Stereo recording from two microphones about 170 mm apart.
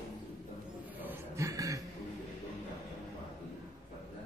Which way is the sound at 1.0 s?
20° right (ahead or behind).